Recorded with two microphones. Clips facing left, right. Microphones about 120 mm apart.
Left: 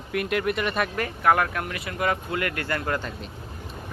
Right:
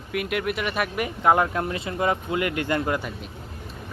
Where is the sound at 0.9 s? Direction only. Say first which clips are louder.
Right 2 dB; 20° right (ahead or behind).